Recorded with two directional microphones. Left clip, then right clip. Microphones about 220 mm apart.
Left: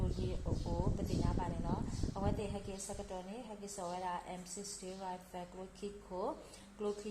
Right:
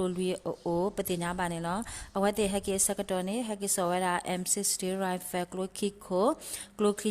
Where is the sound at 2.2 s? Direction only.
45° right (ahead or behind).